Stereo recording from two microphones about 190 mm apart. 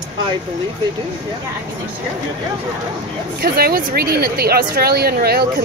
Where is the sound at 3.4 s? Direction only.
55° right (ahead or behind).